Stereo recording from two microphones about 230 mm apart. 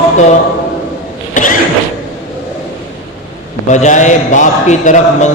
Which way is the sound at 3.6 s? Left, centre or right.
Left.